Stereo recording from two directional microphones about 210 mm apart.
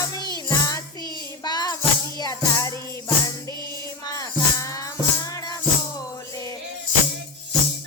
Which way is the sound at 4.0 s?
15° left (ahead or behind).